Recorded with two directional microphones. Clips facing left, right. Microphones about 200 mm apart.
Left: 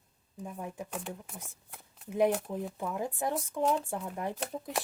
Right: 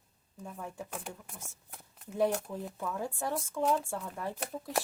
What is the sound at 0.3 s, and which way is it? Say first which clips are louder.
Speech: left 2 dB; 15° left (ahead or behind).